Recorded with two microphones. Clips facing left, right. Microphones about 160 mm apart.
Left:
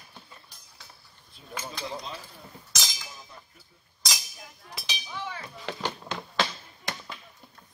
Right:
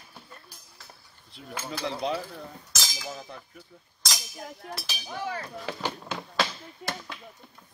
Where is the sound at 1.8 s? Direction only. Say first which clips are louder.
Right 8 dB; 70° right (ahead or behind).